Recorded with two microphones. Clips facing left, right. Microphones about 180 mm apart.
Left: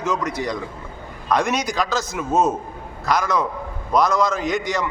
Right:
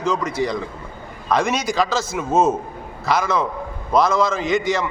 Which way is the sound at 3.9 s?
5° right (ahead or behind).